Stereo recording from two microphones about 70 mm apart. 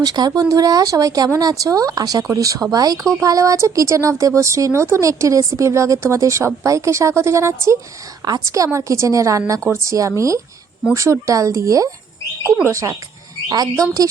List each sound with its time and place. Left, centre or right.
0.0 s speech: right
8.2 s speech: right
13.5 s speech: right